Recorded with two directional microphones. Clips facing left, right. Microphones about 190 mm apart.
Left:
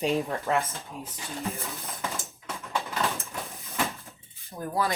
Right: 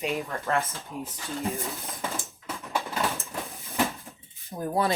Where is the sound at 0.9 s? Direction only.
15° right (ahead or behind).